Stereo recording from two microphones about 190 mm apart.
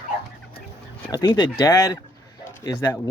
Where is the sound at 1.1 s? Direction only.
20° left (ahead or behind).